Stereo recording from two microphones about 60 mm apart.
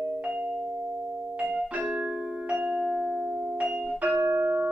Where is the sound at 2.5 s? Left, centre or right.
Centre.